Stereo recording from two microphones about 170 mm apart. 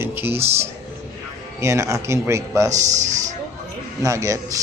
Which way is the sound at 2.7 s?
45° right (ahead or behind).